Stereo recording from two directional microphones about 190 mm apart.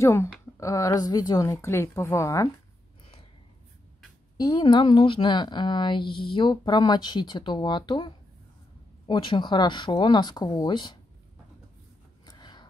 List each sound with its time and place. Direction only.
0.0 s a woman's voice: 15° left (ahead or behind)
4.4 s a woman's voice: 25° left (ahead or behind)
12.3 s a sound: 20° left (ahead or behind)